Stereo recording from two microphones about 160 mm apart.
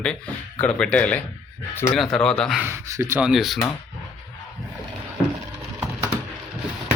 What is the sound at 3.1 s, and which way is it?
Speech, 5° right (ahead or behind).